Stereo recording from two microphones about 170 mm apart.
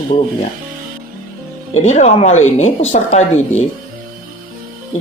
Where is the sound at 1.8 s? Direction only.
40° left (ahead or behind).